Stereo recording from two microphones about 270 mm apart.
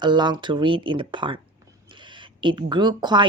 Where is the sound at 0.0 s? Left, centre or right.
Centre.